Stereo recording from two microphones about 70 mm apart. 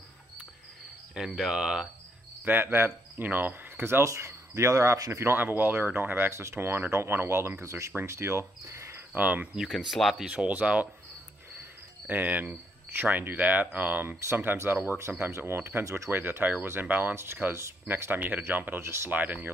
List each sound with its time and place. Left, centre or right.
1.1 s cricket: centre
2.4 s speech: right
5.1 s speech: right
9.1 s speech: right
9.9 s speech: centre
10.2 s cricket: centre
10.5 s speech: right
12.1 s speech: right
16.1 s speech: right
19.0 s speech: right